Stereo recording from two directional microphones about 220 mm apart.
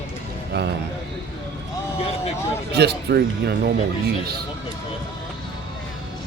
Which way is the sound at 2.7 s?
50° right (ahead or behind).